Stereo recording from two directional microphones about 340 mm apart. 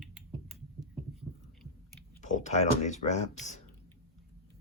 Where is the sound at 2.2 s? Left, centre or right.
Left.